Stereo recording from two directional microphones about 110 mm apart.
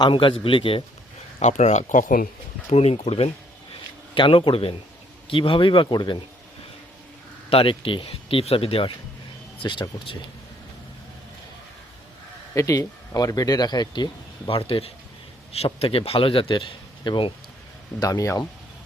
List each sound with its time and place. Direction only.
0.0 s speech: 50° left (ahead or behind)
1.4 s speech: 90° left
2.6 s speech: 75° left (ahead or behind)
4.1 s speech: 55° left (ahead or behind)
7.5 s speech: 55° left (ahead or behind)
9.6 s speech: 45° left (ahead or behind)
12.5 s speech: 30° left (ahead or behind); by 17.3 s 45° left (ahead or behind)
18.0 s speech: 30° left (ahead or behind)